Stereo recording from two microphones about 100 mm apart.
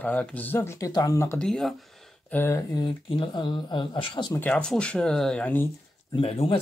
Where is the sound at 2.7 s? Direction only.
55° left (ahead or behind).